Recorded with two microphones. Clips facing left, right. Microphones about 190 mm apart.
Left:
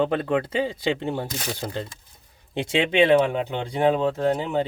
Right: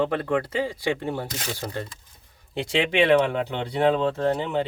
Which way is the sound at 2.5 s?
20° left (ahead or behind).